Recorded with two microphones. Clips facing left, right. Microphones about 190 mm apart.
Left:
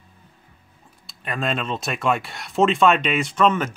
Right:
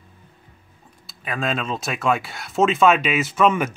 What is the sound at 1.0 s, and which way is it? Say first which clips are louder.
Speech: even; centre (ahead or behind).